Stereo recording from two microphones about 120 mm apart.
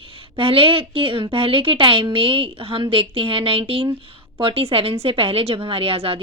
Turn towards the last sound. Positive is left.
turn(degrees=-55)  # may be behind; listen again after turning